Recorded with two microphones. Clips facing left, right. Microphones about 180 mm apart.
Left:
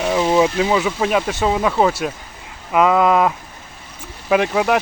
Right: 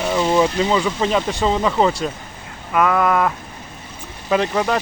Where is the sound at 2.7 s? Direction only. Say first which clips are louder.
Left 3 dB; 20° left (ahead or behind).